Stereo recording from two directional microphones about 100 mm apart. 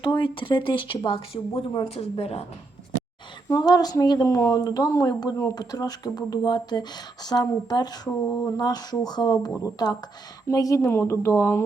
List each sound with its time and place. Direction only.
0.0 s speech: 55° left (ahead or behind); by 2.5 s 90° left
3.5 s speech: 40° left (ahead or behind)